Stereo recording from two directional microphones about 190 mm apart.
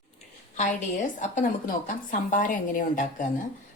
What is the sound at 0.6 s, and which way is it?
A woman's voice, 40° left (ahead or behind).